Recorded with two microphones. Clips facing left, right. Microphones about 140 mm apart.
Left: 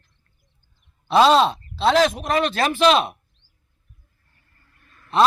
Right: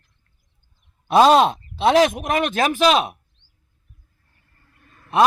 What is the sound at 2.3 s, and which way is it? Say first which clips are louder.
Speech: even; 50° right (ahead or behind).